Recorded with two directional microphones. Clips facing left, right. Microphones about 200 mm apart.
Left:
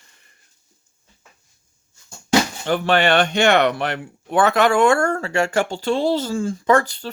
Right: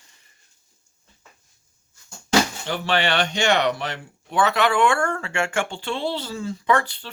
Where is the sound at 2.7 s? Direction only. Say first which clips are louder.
Left 8 dB; 50° left (ahead or behind).